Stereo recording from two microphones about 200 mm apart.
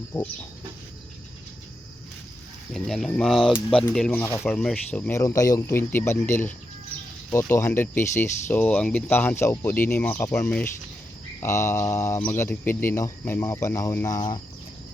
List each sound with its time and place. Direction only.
2.7 s speech: centre (ahead or behind); by 14.4 s 20° left (ahead or behind)